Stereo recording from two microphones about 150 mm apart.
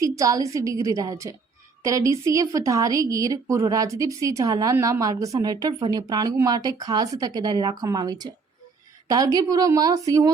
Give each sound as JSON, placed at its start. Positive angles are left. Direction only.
{"t": 0.0, "sound": "a woman's voice", "side_deg": -20}